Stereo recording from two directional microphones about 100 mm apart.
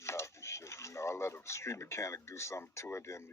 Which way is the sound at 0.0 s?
25° left (ahead or behind).